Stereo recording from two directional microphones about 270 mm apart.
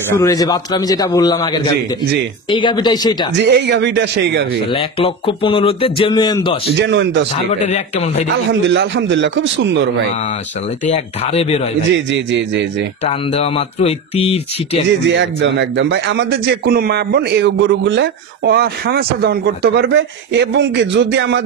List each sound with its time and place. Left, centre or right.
0.2 s a man's voice: centre
3.3 s a man's voice: right
4.7 s speech: centre
6.7 s a man's voice: right
7.5 s speech: left
8.5 s a man's voice: right
10.9 s speech: left
11.9 s a man's voice: right
13.0 s speech: left
15.0 s a man's voice: right